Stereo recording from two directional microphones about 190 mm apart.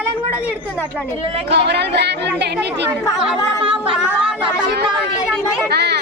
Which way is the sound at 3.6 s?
30° right (ahead or behind).